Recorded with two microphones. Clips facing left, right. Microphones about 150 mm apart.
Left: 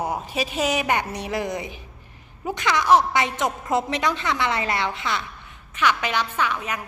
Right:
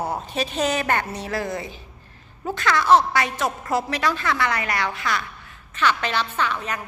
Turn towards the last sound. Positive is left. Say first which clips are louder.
# even
turn(degrees=10)  # may be behind; listen again after turning